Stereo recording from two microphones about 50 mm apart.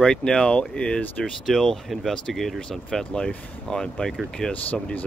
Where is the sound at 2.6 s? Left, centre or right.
Centre.